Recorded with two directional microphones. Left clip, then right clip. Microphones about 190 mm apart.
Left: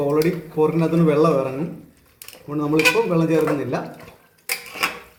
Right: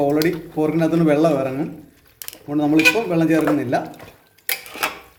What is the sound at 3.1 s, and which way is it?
Speech, 45° right (ahead or behind).